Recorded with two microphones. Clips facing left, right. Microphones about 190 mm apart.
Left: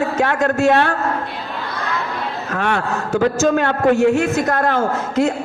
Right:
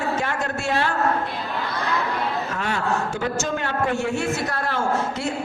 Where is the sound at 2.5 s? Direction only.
65° left (ahead or behind).